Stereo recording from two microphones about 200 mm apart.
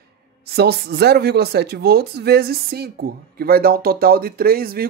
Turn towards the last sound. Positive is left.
turn(degrees=-50)  # may be behind; listen again after turning